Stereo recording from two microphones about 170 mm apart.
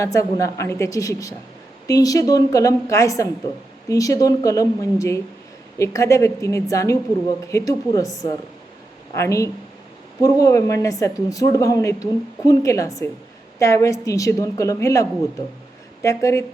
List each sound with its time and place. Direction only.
0.0 s a woman's voice: 20° left (ahead or behind)